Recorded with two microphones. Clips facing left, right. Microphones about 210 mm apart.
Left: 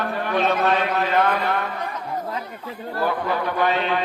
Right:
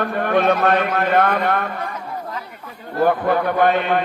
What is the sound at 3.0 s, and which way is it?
A man's voice, 50° right (ahead or behind).